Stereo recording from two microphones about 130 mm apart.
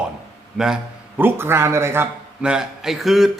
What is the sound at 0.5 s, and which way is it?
Speech, 5° right (ahead or behind).